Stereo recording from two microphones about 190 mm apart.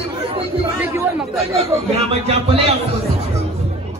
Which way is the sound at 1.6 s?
30° right (ahead or behind).